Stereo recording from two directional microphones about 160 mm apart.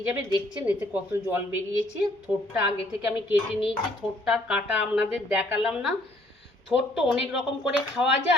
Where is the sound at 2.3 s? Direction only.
10° right (ahead or behind).